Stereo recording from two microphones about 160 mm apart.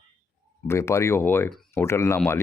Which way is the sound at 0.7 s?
15° left (ahead or behind).